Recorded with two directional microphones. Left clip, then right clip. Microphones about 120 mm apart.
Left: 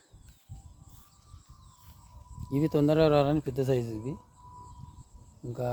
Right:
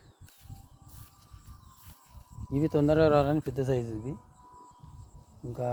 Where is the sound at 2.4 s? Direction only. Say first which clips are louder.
Even; 25° left (ahead or behind).